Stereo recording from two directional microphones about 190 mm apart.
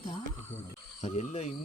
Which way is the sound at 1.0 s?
35° left (ahead or behind).